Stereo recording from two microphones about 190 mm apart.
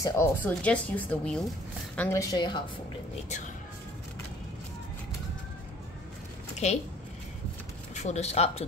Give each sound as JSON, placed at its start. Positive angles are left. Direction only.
{"t": 0.0, "sound": "a woman's voice", "side_deg": 15}
{"t": 6.6, "sound": "a woman's voice", "side_deg": 35}
{"t": 7.9, "sound": "speech", "side_deg": 35}